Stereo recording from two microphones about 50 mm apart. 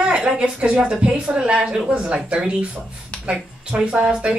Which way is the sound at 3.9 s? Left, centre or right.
Centre.